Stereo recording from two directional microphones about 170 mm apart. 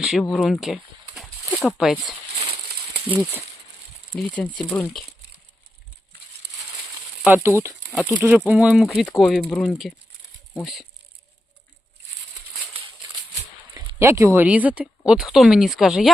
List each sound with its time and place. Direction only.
0.0 s speech: centre (ahead or behind)
4.1 s speech: 5° left (ahead or behind)
7.3 s speech: 10° right (ahead or behind)
13.7 s a sound: 15° right (ahead or behind)
14.3 s speech: 10° right (ahead or behind)